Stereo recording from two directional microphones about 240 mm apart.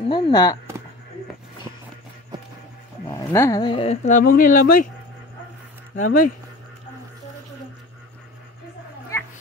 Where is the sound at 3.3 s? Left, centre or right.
Centre; by 4.6 s left.